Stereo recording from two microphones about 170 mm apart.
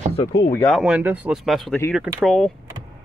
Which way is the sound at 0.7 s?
5° right (ahead or behind).